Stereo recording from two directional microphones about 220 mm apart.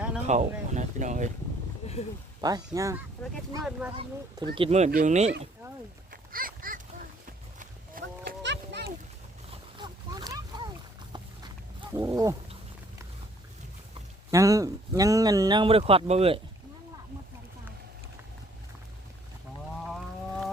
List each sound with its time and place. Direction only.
0.3 s speech: 30° right (ahead or behind)
2.4 s speech: 15° right (ahead or behind)
3.2 s speech: 5° left (ahead or behind)
3.9 s speech: 25° right (ahead or behind)
6.1 s a sound: 40° right (ahead or behind)
9.5 s a sound: 20° right (ahead or behind)
11.1 s wild animals: 20° right (ahead or behind)
14.3 s speech: 15° right (ahead or behind)
19.9 s whale vocalization: centre (ahead or behind)